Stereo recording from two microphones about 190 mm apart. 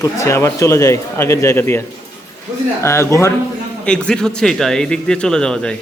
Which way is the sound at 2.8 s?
15° left (ahead or behind).